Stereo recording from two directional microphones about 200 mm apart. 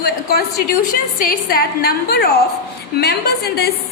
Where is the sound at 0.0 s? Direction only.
50° left (ahead or behind).